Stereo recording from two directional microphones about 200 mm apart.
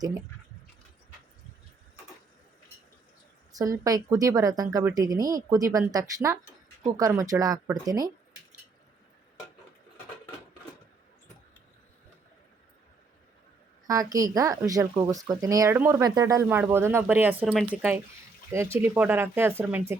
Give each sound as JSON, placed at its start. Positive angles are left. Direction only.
{"t": 3.5, "sound": "speech", "side_deg": -15}
{"t": 13.8, "sound": "speech", "side_deg": -15}